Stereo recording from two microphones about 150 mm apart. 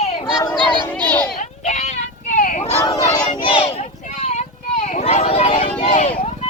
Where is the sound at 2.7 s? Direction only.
25° left (ahead or behind).